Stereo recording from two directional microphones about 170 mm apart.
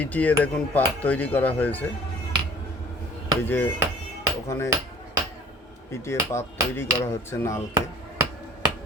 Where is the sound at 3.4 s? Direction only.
10° left (ahead or behind).